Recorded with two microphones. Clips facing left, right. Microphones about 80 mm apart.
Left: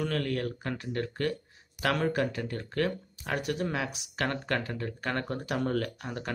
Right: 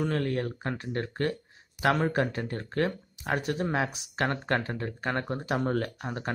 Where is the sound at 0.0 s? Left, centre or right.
Right.